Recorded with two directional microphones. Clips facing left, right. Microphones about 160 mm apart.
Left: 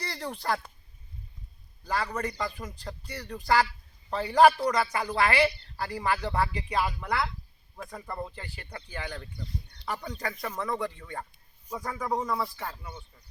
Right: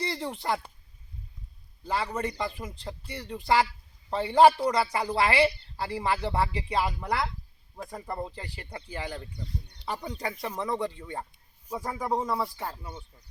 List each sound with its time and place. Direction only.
0.0 s speech: 20° right (ahead or behind)
1.8 s speech: 25° right (ahead or behind)
12.3 s speech: 10° right (ahead or behind)